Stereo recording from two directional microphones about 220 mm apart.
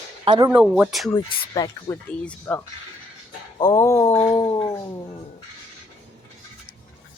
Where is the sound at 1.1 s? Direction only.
15° left (ahead or behind).